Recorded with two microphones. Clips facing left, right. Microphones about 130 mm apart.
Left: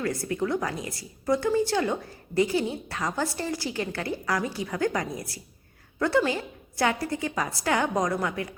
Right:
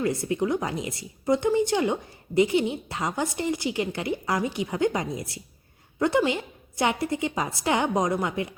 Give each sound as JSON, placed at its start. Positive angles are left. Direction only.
{"t": 0.0, "sound": "a woman's voice", "side_deg": -20}